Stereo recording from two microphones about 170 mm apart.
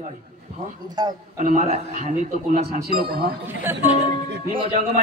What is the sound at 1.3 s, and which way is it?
Speech, 50° right (ahead or behind).